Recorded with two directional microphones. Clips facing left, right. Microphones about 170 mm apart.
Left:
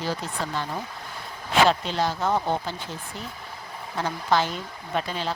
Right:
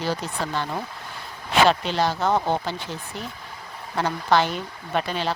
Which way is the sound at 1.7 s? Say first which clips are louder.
Right 2 dB; 75° right (ahead or behind).